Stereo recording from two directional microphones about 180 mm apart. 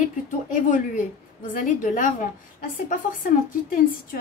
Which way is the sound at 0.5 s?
50° left (ahead or behind).